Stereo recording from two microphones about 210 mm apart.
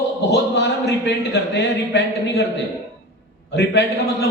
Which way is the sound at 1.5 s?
55° left (ahead or behind).